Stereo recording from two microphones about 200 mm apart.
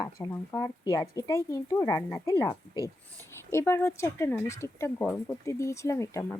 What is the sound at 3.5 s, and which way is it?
Speech, 15° left (ahead or behind).